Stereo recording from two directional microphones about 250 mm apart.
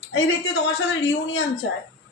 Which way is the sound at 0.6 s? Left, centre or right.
Left.